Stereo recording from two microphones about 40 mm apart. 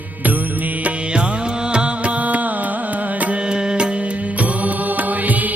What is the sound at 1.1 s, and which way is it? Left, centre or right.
Music, right.